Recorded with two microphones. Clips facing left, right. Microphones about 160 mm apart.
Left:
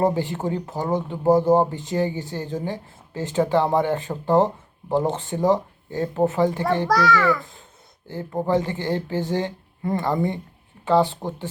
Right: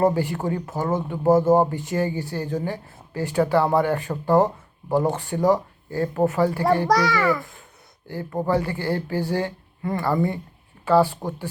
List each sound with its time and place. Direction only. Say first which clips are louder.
0.0 s speech: right 1 dB; 20° left (ahead or behind)
6.8 s a child's voice: left 1 dB; 15° right (ahead or behind)
8.0 s speech: even; 15° left (ahead or behind)